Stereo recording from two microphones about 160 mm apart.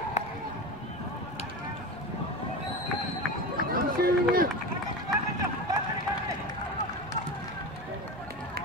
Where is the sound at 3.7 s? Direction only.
65° right (ahead or behind).